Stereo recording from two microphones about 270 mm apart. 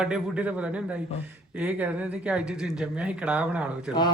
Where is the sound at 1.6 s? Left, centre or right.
Centre.